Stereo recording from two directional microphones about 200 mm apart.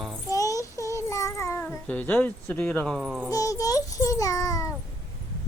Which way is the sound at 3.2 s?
15° left (ahead or behind).